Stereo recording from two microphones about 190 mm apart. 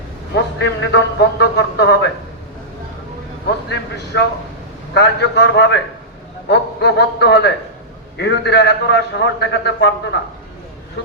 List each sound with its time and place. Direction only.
0.6 s speech: 70° left (ahead or behind)
3.7 s a man's voice: 65° left (ahead or behind)